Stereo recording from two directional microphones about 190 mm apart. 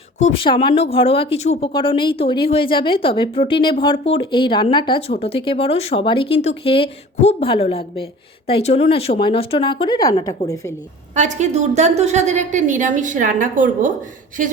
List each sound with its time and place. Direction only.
0.2 s speech: 25° left (ahead or behind)
11.1 s a woman's voice: 40° right (ahead or behind)